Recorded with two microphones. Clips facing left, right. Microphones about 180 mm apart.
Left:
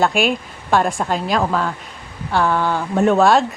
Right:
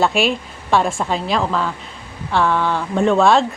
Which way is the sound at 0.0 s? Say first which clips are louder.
Even; centre (ahead or behind).